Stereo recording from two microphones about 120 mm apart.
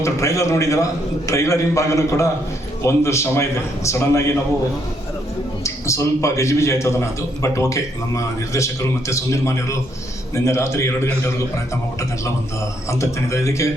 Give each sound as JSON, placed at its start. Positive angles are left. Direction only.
{"t": 0.0, "sound": "a man's voice", "side_deg": 25}
{"t": 5.6, "sound": "a man's voice", "side_deg": 25}
{"t": 12.9, "sound": "a man's voice", "side_deg": 25}